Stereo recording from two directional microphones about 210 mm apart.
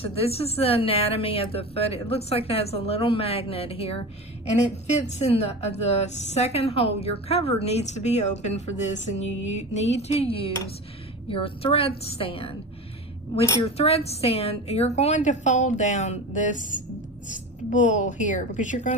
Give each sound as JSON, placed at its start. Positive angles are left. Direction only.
{"t": 0.0, "sound": "a woman's voice", "side_deg": 30}
{"t": 17.6, "sound": "a woman's voice", "side_deg": 35}